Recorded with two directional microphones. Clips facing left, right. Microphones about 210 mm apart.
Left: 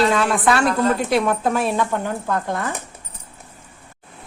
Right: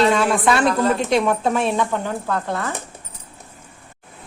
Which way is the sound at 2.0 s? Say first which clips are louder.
Left 1 dB; 15° left (ahead or behind).